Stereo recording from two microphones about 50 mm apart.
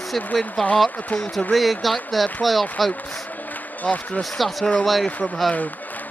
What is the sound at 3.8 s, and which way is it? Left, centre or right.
Speech, left.